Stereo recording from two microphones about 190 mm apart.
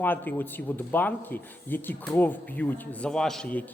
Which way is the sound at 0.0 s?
10° left (ahead or behind).